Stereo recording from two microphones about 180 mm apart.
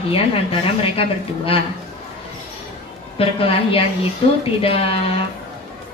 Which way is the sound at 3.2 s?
30° left (ahead or behind).